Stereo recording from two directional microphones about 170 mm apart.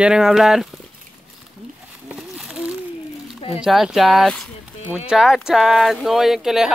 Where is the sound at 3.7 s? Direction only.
Centre (ahead or behind).